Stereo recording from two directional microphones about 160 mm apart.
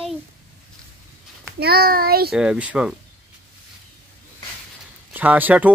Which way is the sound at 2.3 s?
5° right (ahead or behind).